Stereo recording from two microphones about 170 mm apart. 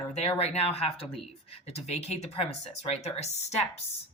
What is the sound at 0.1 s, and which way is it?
Speech, 35° left (ahead or behind).